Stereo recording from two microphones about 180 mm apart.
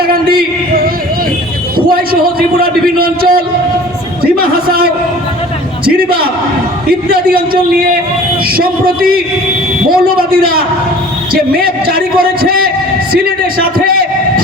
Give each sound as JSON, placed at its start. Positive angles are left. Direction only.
{"t": 0.3, "sound": "a sound", "side_deg": -55}
{"t": 2.6, "sound": "a man's voice", "side_deg": -55}
{"t": 4.2, "sound": "a sound", "side_deg": -55}
{"t": 7.1, "sound": "a man's voice", "side_deg": -55}
{"t": 11.6, "sound": "a man's voice", "side_deg": -55}
{"t": 13.6, "sound": "a man's voice", "side_deg": -55}